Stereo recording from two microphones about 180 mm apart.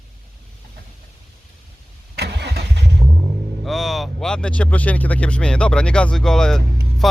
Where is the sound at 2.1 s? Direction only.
65° right (ahead or behind).